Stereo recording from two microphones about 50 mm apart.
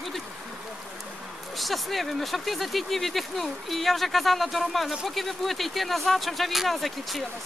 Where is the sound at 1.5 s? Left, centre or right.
Centre.